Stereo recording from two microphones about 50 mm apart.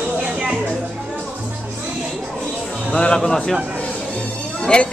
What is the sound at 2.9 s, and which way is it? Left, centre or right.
Speech, centre.